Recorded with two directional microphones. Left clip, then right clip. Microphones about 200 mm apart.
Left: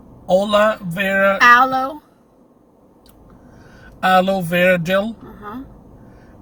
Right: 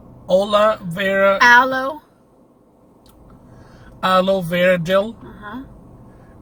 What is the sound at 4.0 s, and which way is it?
Speech, 15° left (ahead or behind).